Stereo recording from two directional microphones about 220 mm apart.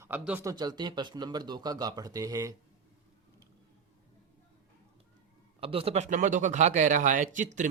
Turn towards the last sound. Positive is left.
turn(degrees=-35)  # may be behind; listen again after turning